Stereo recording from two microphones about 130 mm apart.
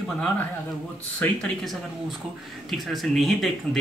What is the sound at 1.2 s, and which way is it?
A man's voice, 5° left (ahead or behind).